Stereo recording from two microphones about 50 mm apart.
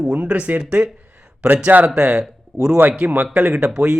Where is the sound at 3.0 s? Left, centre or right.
Right; by 3.9 s centre.